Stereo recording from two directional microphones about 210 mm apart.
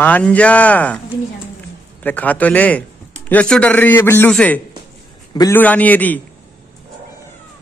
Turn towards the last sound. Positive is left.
turn(degrees=10)  # may be behind; listen again after turning